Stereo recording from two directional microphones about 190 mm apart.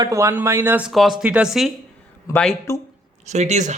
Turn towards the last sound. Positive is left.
turn(degrees=-35)  # may be behind; listen again after turning